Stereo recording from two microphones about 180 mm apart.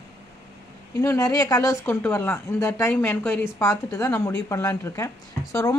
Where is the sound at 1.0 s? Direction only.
15° left (ahead or behind).